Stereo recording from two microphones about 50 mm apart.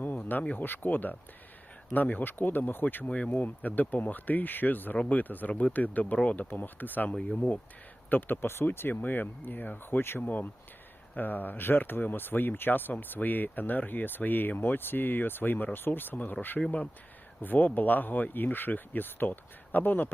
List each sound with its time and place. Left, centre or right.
0.3 s speech: left
7.2 s speech: left
8.1 s speech: left
10.2 s speech: left